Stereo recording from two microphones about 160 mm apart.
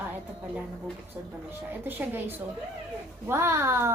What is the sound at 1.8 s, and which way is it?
A woman's voice, 15° right (ahead or behind).